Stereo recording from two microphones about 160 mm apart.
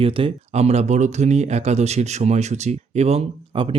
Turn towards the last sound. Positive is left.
turn(degrees=-35)  # may be behind; listen again after turning